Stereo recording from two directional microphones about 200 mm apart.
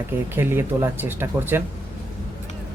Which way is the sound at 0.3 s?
10° right (ahead or behind).